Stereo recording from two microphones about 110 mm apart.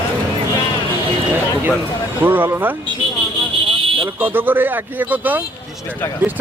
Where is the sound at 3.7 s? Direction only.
55° right (ahead or behind).